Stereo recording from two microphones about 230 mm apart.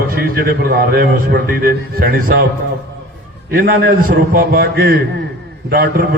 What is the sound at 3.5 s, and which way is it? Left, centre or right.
A man's voice, right.